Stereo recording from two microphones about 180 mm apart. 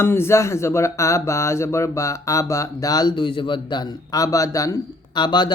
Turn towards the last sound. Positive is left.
turn(degrees=25)  # may be behind; listen again after turning